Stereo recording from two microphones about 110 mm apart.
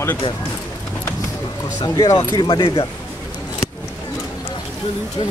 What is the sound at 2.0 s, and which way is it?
Speech, 35° left (ahead or behind).